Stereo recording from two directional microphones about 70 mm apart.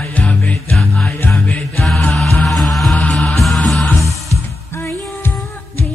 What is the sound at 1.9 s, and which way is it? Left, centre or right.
Music, centre.